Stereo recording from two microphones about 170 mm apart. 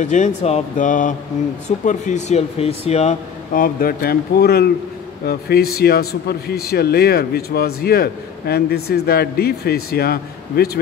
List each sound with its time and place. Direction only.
0.0 s speech: 45° left (ahead or behind)
3.5 s speech: 55° left (ahead or behind)